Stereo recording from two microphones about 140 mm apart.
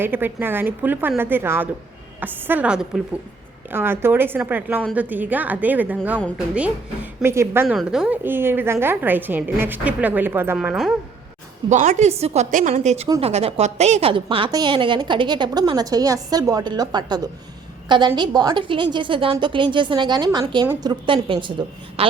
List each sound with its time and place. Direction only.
0.0 s a woman's voice: 15° right (ahead or behind)
3.7 s a woman's voice: 15° right (ahead or behind)
7.8 s a woman's voice: 5° right (ahead or behind)
11.7 s a woman's voice: 55° right (ahead or behind); by 21.5 s 35° right (ahead or behind)